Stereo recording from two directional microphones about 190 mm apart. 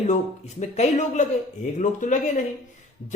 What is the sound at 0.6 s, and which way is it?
Speech, 40° left (ahead or behind).